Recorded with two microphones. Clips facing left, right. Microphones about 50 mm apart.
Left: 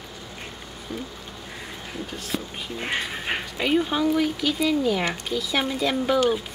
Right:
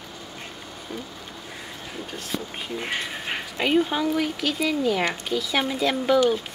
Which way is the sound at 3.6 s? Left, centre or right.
Centre.